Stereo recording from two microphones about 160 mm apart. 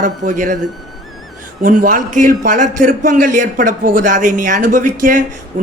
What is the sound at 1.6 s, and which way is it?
A man's voice, 55° right (ahead or behind).